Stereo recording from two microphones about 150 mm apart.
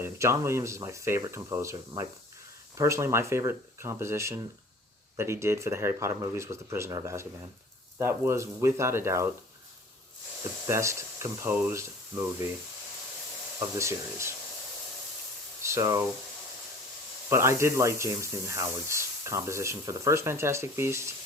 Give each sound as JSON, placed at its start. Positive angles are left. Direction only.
{"t": 0.0, "sound": "speech", "side_deg": -20}
{"t": 10.7, "sound": "speech", "side_deg": -20}
{"t": 13.6, "sound": "speech", "side_deg": -20}
{"t": 15.6, "sound": "speech", "side_deg": -20}
{"t": 17.2, "sound": "speech", "side_deg": -20}